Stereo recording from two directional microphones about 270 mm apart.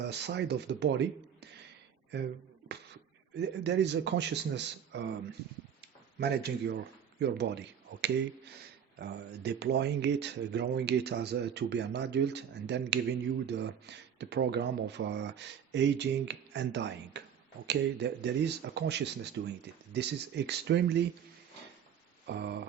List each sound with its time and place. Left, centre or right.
0.0 s speech: right
3.3 s speech: right
6.1 s speech: right
9.0 s speech: right
22.3 s speech: right